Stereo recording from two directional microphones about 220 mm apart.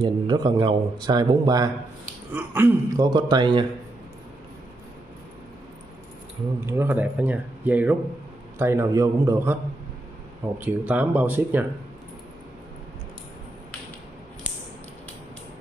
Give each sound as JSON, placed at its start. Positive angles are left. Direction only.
{"t": 0.0, "sound": "speech", "side_deg": -20}
{"t": 6.6, "sound": "speech", "side_deg": -10}
{"t": 10.6, "sound": "speech", "side_deg": -10}